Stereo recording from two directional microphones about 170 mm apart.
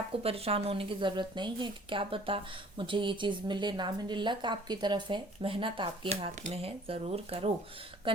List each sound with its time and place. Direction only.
0.2 s a woman's voice: 35° right (ahead or behind)